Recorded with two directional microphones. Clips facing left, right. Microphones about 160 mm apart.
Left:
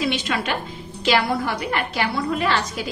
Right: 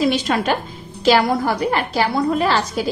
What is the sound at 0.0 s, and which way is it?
A woman's voice, 40° right (ahead or behind).